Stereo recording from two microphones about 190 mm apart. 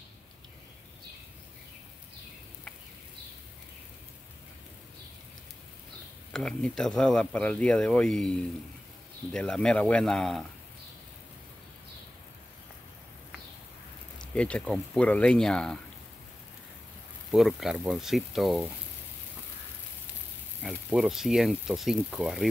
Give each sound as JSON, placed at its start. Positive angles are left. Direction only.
{"t": 6.3, "sound": "speech", "side_deg": 5}
{"t": 14.3, "sound": "speech", "side_deg": 5}
{"t": 17.3, "sound": "speech", "side_deg": 0}
{"t": 20.6, "sound": "speech", "side_deg": 0}